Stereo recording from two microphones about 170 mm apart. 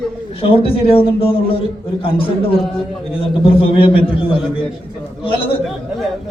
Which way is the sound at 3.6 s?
30° left (ahead or behind).